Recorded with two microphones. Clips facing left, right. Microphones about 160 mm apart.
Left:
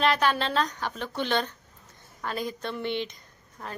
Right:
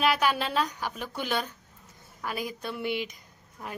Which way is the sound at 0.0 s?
10° right (ahead or behind).